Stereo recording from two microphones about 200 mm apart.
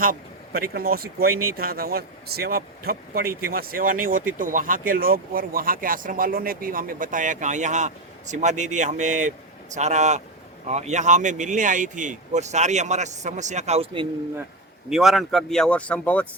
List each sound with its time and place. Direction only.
0.0 s speech: 45° right (ahead or behind); by 14.1 s 30° right (ahead or behind)
14.8 s speech: centre (ahead or behind)